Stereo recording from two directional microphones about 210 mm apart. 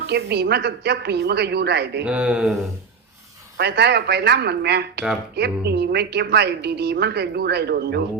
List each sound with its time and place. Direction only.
0.1 s a woman's voice: 50° right (ahead or behind)
2.0 s speech: 5° right (ahead or behind)
3.6 s a woman's voice: 50° right (ahead or behind)